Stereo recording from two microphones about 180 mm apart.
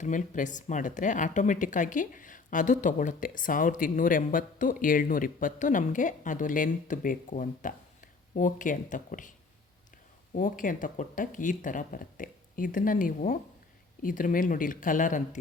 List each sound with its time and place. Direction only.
0.0 s speech: 45° left (ahead or behind)
10.3 s speech: 45° left (ahead or behind)